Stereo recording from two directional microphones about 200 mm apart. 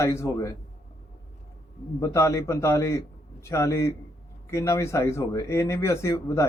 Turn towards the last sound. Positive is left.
turn(degrees=15)  # may be behind; listen again after turning